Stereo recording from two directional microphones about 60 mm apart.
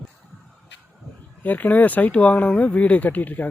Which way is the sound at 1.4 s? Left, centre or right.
Left.